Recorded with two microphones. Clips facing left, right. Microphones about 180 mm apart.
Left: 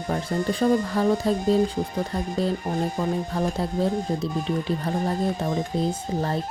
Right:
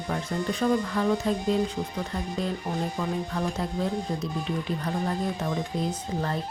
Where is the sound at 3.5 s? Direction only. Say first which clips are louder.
Left 4 dB; 30° left (ahead or behind).